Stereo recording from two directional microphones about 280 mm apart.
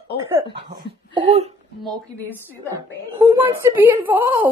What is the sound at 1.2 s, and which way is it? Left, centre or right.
Speech, right.